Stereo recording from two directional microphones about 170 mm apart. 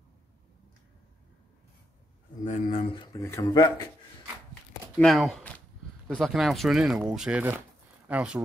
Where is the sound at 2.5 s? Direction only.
45° left (ahead or behind).